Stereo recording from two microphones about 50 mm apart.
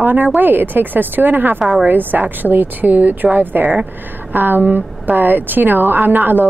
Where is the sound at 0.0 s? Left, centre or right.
Right.